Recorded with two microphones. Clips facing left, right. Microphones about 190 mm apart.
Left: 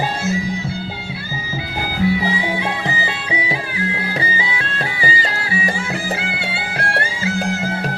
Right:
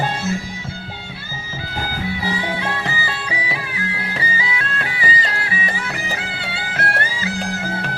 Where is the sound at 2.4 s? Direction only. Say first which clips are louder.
Left 2 dB; 15° left (ahead or behind); by 7.0 s 30° left (ahead or behind).